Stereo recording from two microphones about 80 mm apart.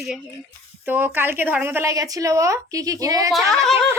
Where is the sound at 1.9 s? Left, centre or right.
Right.